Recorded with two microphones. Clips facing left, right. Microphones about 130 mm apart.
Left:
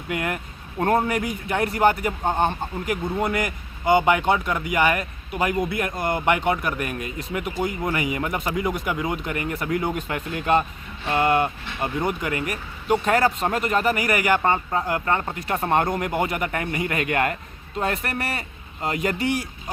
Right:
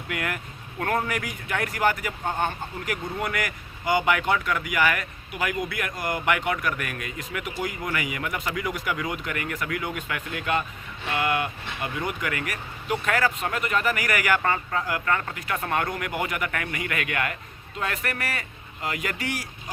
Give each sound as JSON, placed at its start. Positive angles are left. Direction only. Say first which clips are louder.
{"t": 0.1, "sound": "a man's voice", "louder": "left 4 dB", "side_deg": 25}